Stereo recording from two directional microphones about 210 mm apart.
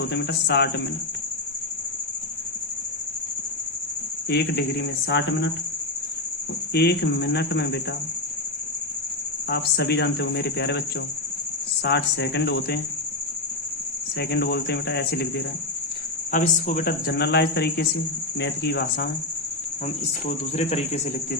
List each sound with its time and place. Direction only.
0.1 s speech: 55° left (ahead or behind)
4.3 s speech: 50° left (ahead or behind)
6.7 s speech: 50° left (ahead or behind)
9.5 s speech: 50° left (ahead or behind)
14.2 s speech: 50° left (ahead or behind)
16.3 s speech: 40° left (ahead or behind)
20.2 s speech: 30° left (ahead or behind)